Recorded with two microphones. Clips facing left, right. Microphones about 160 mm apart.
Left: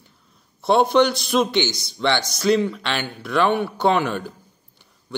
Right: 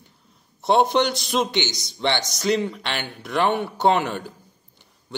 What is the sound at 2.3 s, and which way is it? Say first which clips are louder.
Speech: left 4 dB; 55° left (ahead or behind).